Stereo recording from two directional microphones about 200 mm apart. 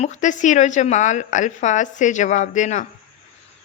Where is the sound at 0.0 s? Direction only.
35° left (ahead or behind).